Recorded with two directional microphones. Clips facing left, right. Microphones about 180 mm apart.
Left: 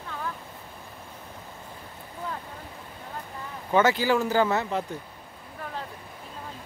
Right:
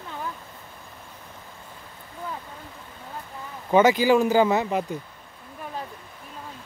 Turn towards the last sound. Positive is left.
turn(degrees=-15)  # may be behind; listen again after turning